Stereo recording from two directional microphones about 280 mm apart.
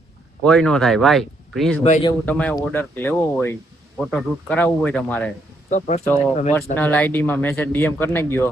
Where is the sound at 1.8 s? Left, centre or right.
Centre.